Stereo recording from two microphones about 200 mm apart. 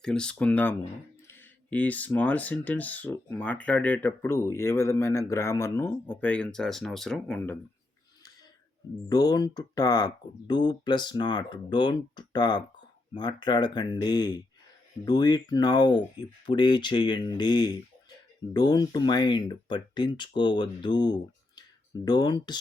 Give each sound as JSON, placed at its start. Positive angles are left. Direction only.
{"t": 0.0, "sound": "speech", "side_deg": 5}
{"t": 9.0, "sound": "speech", "side_deg": 20}